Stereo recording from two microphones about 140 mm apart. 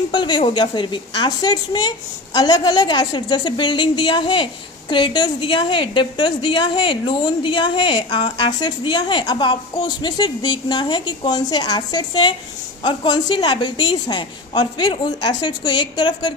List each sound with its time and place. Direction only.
0.1 s a woman's voice: 35° left (ahead or behind)